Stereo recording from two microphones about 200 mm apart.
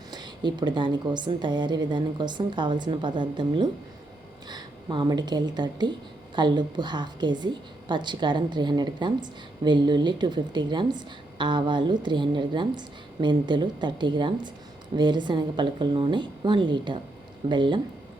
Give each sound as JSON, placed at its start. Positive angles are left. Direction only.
{"t": 0.1, "sound": "a woman's voice", "side_deg": -20}